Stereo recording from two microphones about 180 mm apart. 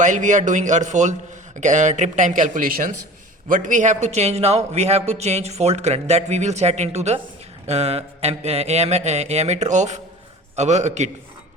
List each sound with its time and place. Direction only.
0.0 s a man's voice: 45° right (ahead or behind)